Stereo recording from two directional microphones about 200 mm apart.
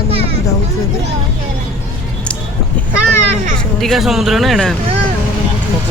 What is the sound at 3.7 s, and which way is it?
Speech, centre (ahead or behind).